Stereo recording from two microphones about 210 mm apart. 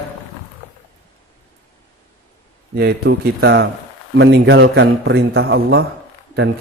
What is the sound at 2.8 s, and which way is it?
A man's voice, 50° right (ahead or behind).